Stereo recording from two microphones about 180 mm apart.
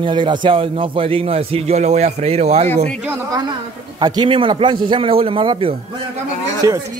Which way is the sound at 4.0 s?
25° right (ahead or behind).